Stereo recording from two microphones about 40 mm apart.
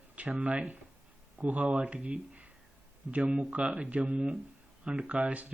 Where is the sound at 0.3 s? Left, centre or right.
Right.